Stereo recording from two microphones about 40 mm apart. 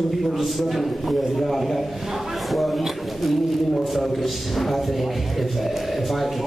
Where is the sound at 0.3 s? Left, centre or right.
Centre.